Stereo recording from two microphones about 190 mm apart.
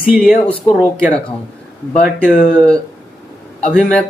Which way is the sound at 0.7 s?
5° left (ahead or behind).